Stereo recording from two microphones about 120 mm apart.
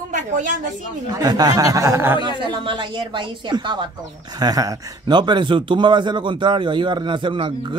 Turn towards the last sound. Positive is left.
turn(degrees=-40)  # may be behind; listen again after turning